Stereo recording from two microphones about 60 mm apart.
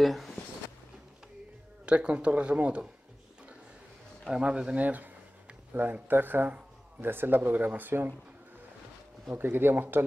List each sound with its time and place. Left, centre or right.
0.0 s speech: centre
1.9 s speech: centre
4.3 s a man's voice: centre
4.7 s speech: right
9.3 s speech: right